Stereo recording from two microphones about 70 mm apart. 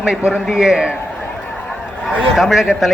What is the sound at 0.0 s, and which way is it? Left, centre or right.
Speech, centre.